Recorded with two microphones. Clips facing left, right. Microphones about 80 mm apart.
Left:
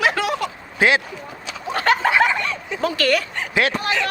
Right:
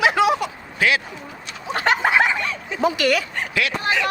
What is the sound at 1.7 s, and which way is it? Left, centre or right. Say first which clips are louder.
Snicker: left 1 dB; centre.